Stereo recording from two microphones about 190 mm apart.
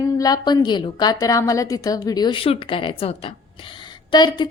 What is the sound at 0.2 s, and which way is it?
A woman's voice, 20° left (ahead or behind).